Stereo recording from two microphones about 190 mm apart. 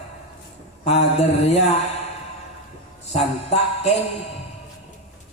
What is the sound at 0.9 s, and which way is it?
Music, 35° left (ahead or behind).